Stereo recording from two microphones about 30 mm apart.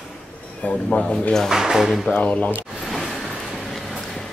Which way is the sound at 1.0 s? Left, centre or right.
Left.